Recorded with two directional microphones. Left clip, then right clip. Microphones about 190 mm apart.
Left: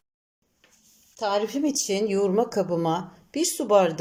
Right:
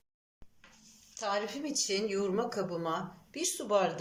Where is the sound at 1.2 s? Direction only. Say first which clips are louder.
Left 9 dB; 40° left (ahead or behind).